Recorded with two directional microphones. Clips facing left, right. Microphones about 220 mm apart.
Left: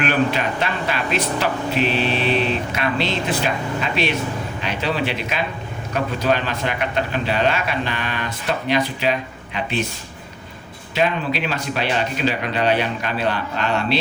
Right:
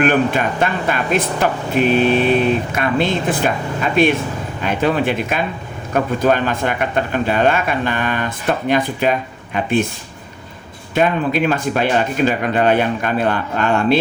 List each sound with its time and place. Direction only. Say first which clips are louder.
0.0 s a man's voice: right 4 dB; 50° right (ahead or behind)
10.9 s a man's voice: right 5 dB; 50° right (ahead or behind)